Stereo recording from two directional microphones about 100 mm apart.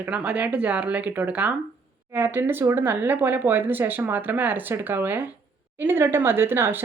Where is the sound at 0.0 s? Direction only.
15° right (ahead or behind).